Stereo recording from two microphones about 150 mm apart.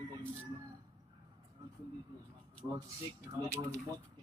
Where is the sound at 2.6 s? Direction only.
20° right (ahead or behind).